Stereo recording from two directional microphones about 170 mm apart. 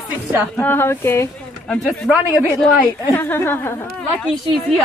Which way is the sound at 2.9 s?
15° left (ahead or behind).